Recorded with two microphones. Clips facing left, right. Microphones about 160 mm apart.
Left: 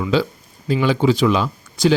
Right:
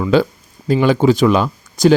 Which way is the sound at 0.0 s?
50° right (ahead or behind).